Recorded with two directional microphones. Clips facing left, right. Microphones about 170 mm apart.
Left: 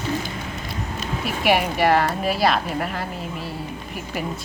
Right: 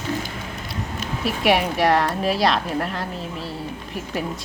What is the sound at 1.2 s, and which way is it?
Speech, centre (ahead or behind).